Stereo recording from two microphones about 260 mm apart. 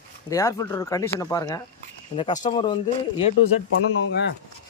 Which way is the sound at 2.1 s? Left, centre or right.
Left.